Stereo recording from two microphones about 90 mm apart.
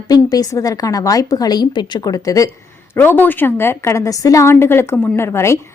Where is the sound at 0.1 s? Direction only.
45° left (ahead or behind).